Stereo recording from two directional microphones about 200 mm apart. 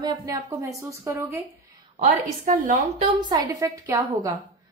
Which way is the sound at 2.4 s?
40° right (ahead or behind).